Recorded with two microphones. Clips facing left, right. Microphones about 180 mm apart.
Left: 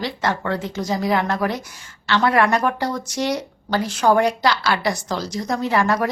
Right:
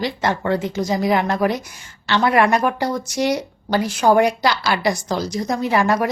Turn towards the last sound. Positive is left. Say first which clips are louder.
# right 1 dB
turn(degrees=-10)  # may be behind; listen again after turning